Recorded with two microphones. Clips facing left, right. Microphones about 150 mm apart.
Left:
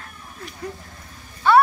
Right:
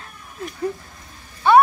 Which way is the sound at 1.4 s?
15° right (ahead or behind).